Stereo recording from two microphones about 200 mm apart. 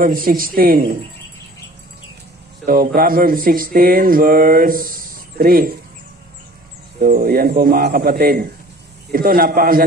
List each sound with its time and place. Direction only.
0.0 s speech: 45° right (ahead or behind)
2.6 s speech: 45° right (ahead or behind)
7.0 s speech: 45° right (ahead or behind)